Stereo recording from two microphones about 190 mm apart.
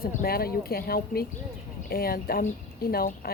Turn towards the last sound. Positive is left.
turn(degrees=50)  # may be behind; listen again after turning